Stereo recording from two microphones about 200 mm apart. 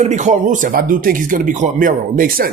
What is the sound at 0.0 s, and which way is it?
Speech, 35° right (ahead or behind).